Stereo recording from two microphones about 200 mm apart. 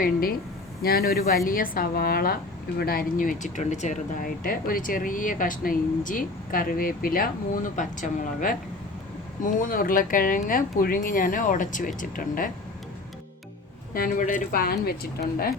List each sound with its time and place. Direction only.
0.0 s a woman's voice: 45° left (ahead or behind)
13.9 s a woman's voice: 45° left (ahead or behind)